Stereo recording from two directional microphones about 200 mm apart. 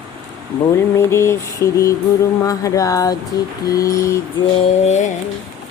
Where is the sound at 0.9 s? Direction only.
15° left (ahead or behind).